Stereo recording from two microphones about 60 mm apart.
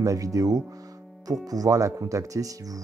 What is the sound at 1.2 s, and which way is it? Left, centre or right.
Speech, right.